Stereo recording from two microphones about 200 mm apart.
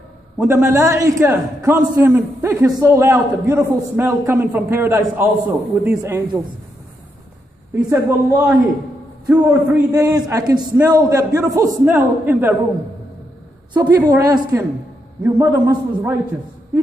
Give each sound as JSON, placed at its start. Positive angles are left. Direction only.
{"t": 0.4, "sound": "a man's voice", "side_deg": -10}
{"t": 7.7, "sound": "a man's voice", "side_deg": -15}
{"t": 9.8, "sound": "a man's voice", "side_deg": -15}
{"t": 13.7, "sound": "a man's voice", "side_deg": -20}